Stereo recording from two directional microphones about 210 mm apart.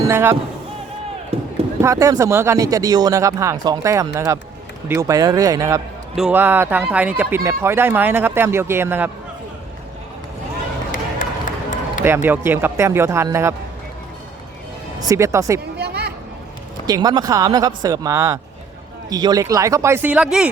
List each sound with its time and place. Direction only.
0.1 s speech: 10° right (ahead or behind)
1.3 s chop: 30° right (ahead or behind)
1.8 s speech: 15° right (ahead or behind)
10.9 s run: 40° left (ahead or behind)
12.0 s speech: 10° right (ahead or behind)
15.0 s speech: 15° right (ahead or behind)
15.8 s a sound: 50° right (ahead or behind)
16.8 s speech: 20° right (ahead or behind)